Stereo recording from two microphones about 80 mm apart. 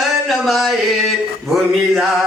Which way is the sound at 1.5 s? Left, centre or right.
Centre.